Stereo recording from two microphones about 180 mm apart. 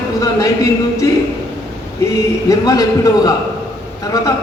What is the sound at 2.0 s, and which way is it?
A man's voice, 15° left (ahead or behind).